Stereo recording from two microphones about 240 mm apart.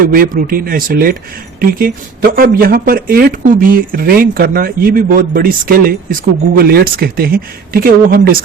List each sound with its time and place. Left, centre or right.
0.0 s speech: right
2.3 s speech: right